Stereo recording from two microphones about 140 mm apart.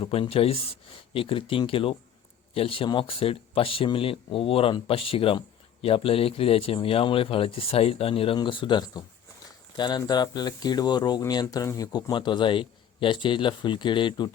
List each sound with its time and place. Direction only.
0.0 s speech: 45° left (ahead or behind)